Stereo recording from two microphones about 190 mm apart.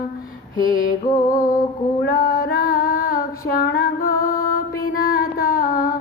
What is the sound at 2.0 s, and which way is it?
Female singing, 50° left (ahead or behind).